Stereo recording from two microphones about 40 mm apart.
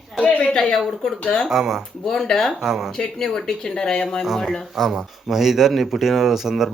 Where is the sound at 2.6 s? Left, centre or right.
Centre.